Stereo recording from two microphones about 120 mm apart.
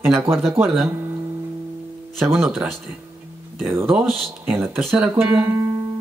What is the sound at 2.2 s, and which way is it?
Speech, 20° right (ahead or behind).